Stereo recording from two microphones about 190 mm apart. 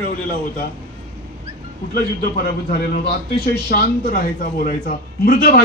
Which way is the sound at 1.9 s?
55° left (ahead or behind).